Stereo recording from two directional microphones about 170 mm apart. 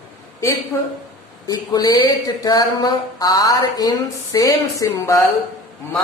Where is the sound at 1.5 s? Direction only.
20° left (ahead or behind).